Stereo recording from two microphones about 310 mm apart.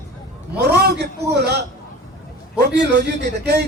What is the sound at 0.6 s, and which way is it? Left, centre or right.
Speech, right.